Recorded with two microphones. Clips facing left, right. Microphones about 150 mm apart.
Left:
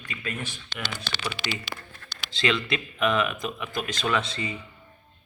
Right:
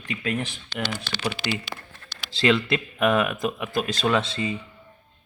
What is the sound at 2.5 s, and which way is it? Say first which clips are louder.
A man's voice: right 5 dB; 45° right (ahead or behind).